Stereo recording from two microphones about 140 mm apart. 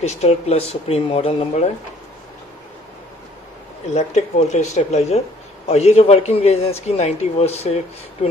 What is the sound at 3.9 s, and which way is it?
Speech, 55° left (ahead or behind).